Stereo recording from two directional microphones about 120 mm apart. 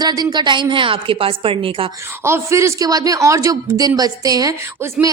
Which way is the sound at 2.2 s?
25° right (ahead or behind).